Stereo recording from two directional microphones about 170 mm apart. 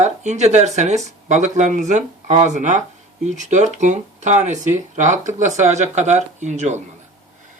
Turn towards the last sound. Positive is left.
turn(degrees=-45)  # may be behind; listen again after turning